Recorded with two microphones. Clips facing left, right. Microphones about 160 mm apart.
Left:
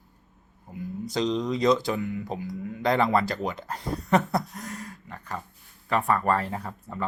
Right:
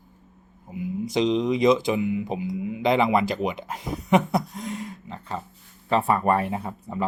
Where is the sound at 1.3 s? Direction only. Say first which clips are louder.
Right 3 dB; 20° right (ahead or behind).